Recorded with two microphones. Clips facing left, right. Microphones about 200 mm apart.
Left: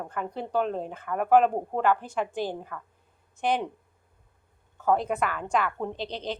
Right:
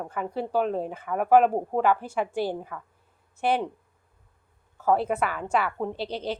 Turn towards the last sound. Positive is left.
turn(degrees=-10)  # may be behind; listen again after turning